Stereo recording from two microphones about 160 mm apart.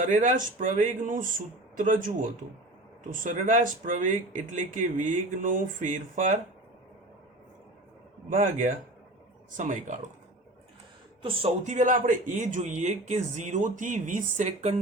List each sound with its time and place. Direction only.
0.0 s speech: 55° right (ahead or behind)
8.3 s speech: 50° right (ahead or behind)
11.2 s speech: 35° right (ahead or behind)
11.6 s speech: 50° right (ahead or behind)